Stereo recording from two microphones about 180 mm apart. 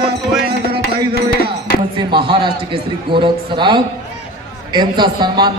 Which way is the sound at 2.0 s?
25° right (ahead or behind).